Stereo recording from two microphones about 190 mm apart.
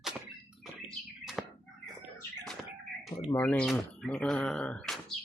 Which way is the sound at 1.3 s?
Centre (ahead or behind).